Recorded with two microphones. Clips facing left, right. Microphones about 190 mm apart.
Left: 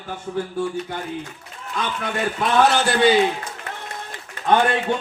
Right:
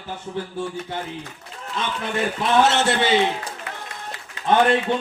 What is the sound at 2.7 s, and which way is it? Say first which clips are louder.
Speech: left 2 dB; 25° right (ahead or behind).